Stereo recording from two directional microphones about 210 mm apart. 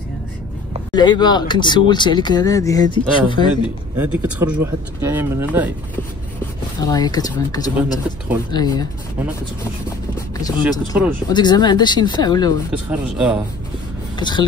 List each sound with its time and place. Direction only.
0.9 s speech: 20° left (ahead or behind)
3.6 s speech: 10° right (ahead or behind)
6.8 s speech: 20° left (ahead or behind)
10.1 s speech: 15° left (ahead or behind)
14.1 s speech: 20° left (ahead or behind)